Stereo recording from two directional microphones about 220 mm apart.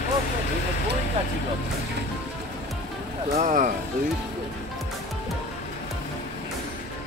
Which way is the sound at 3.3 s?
35° right (ahead or behind).